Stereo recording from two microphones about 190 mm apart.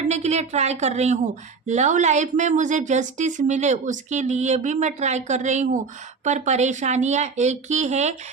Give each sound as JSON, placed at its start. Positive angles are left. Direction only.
{"t": 0.1, "sound": "a woman's voice", "side_deg": -35}